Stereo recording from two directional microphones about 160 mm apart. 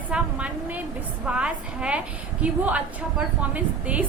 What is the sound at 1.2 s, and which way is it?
A woman's voice, 5° right (ahead or behind).